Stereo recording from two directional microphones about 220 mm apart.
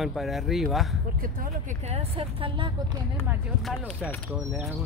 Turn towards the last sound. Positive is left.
turn(degrees=5)  # may be behind; listen again after turning